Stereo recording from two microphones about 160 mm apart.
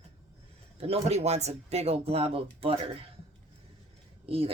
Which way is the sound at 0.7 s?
40° right (ahead or behind).